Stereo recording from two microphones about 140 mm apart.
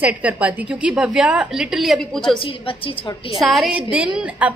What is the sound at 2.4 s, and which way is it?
A woman's voice, 40° left (ahead or behind).